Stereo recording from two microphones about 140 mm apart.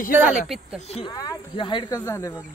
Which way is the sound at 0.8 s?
50° left (ahead or behind).